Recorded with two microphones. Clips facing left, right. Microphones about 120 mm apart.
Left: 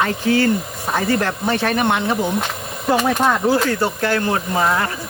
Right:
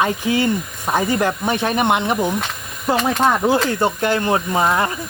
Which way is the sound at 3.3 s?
20° right (ahead or behind).